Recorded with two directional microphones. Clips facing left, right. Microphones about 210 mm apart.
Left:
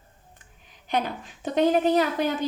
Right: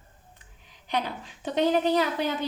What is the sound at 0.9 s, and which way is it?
A woman's voice, 50° left (ahead or behind).